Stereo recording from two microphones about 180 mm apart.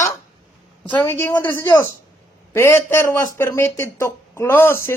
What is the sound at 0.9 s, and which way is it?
Speech, 10° left (ahead or behind).